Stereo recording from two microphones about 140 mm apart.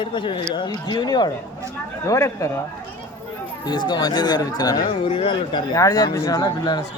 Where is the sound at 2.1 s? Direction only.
20° left (ahead or behind).